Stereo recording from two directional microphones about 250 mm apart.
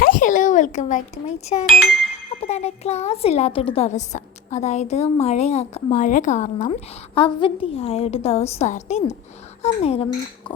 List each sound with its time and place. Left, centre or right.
0.0 s a child's voice: left